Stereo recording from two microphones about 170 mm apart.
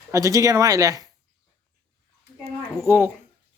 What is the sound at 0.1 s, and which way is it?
Speech, 20° right (ahead or behind).